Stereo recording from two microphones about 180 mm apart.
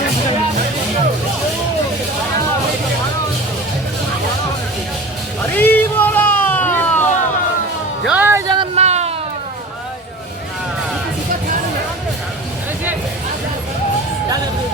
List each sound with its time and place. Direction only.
5.5 s music: 10° left (ahead or behind)
8.0 s music: 10° right (ahead or behind)
8.5 s a sound: 35° right (ahead or behind)